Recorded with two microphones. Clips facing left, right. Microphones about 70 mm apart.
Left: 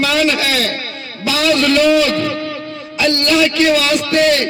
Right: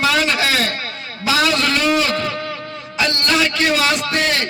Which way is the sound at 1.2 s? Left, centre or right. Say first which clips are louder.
Left 3 dB; right.